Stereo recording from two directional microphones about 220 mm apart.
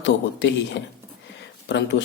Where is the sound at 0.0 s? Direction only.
50° left (ahead or behind).